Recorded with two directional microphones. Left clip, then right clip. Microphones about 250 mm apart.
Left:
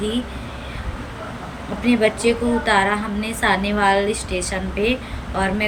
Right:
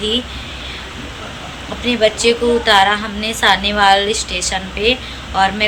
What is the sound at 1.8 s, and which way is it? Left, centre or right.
A woman's voice, centre.